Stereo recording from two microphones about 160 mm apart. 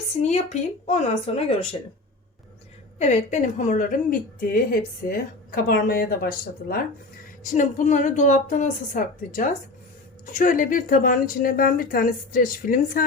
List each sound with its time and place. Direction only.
0.2 s a woman's voice: 45° left (ahead or behind)
3.0 s a woman's voice: 45° left (ahead or behind); by 6.1 s 65° left (ahead or behind)
7.5 s a woman's voice: 50° left (ahead or behind)